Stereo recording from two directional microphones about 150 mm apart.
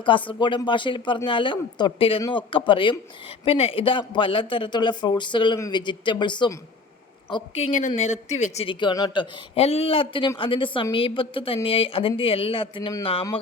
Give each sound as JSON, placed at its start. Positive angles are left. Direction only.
{"t": 0.0, "sound": "speech", "side_deg": 35}
{"t": 7.8, "sound": "speech", "side_deg": 55}
{"t": 8.6, "sound": "speech", "side_deg": 30}
{"t": 9.6, "sound": "speech", "side_deg": 40}